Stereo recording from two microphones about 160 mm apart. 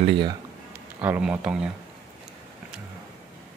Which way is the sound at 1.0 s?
10° right (ahead or behind).